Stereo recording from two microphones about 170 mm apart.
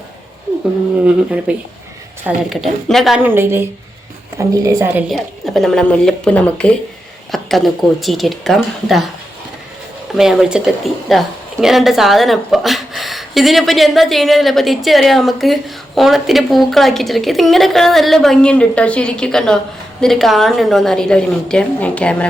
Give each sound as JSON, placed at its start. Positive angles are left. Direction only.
{"t": 1.0, "sound": "a woman's voice", "side_deg": -10}
{"t": 3.2, "sound": "a woman's voice", "side_deg": -15}
{"t": 5.1, "sound": "a woman's voice", "side_deg": 0}
{"t": 10.2, "sound": "a woman's voice", "side_deg": -5}